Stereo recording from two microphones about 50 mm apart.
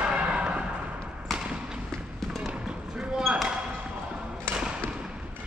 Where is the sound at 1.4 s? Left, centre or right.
Centre.